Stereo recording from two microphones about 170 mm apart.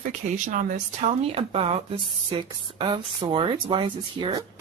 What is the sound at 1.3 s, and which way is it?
Speech, 35° right (ahead or behind).